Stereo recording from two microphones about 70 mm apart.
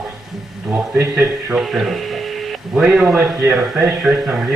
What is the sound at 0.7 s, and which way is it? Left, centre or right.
Speech, right.